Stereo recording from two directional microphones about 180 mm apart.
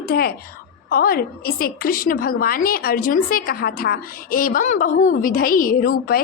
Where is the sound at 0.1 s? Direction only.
60° left (ahead or behind).